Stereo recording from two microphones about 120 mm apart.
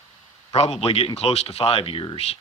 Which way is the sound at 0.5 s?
60° left (ahead or behind).